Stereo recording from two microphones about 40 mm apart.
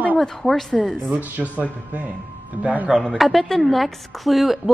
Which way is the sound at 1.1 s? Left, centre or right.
Right.